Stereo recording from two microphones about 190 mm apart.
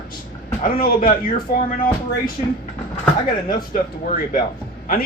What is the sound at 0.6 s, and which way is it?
Speech, 45° left (ahead or behind).